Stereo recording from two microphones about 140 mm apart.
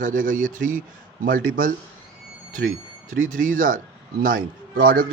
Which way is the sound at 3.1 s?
70° right (ahead or behind).